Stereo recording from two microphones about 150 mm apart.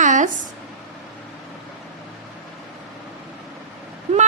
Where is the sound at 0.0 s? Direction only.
55° right (ahead or behind).